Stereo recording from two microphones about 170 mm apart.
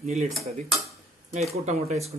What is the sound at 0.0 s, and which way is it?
Dishes, 45° right (ahead or behind).